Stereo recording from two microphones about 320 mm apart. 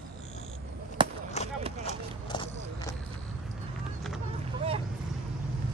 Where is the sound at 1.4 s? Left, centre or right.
Left.